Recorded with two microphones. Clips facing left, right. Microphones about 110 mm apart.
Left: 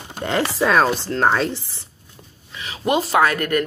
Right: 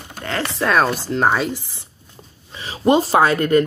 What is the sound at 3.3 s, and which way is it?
Speech, 25° right (ahead or behind).